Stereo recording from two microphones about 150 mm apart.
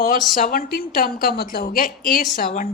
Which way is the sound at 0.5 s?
75° left (ahead or behind).